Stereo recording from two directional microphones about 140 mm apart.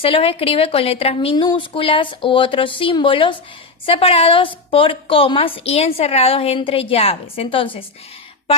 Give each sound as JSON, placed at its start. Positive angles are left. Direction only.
{"t": 0.0, "sound": "a woman's voice", "side_deg": 40}